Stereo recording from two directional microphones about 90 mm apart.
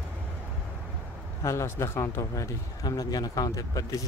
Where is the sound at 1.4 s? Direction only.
30° left (ahead or behind).